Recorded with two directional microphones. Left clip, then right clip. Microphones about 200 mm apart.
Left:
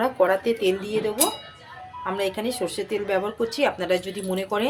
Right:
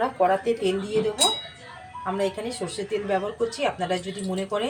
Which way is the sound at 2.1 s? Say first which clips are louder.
Left 2 dB; 60° left (ahead or behind).